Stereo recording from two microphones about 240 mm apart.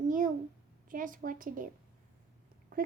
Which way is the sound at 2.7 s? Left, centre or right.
Right.